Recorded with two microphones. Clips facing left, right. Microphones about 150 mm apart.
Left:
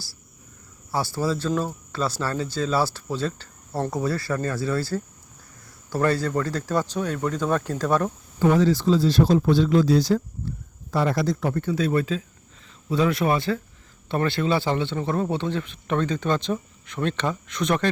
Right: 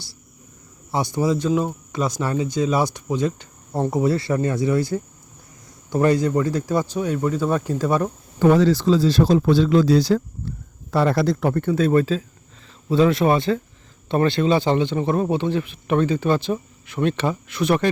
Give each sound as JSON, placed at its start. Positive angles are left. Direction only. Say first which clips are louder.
{"t": 0.9, "sound": "speech", "louder": "right 4 dB", "side_deg": -20}
{"t": 8.4, "sound": "speech", "louder": "right 4 dB", "side_deg": -80}
{"t": 12.9, "sound": "speech", "louder": "right 5 dB", "side_deg": -25}